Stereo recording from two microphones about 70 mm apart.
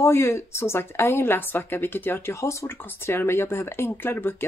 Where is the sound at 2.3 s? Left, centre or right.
Left.